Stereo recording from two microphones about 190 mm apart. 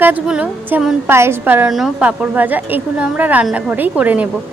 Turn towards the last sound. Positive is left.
turn(degrees=-10)  # may be behind; listen again after turning